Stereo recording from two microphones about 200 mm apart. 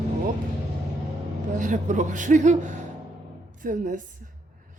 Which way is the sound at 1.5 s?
40° right (ahead or behind).